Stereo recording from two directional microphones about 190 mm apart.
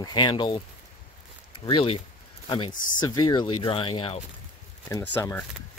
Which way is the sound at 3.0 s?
20° left (ahead or behind).